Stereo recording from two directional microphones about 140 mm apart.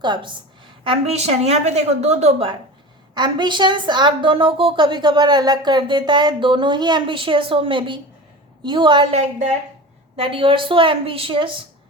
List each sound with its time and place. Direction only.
0.0 s a woman's voice: 35° right (ahead or behind)
3.2 s a woman's voice: 30° right (ahead or behind); by 9.6 s 50° right (ahead or behind)
10.2 s a woman's voice: 40° right (ahead or behind)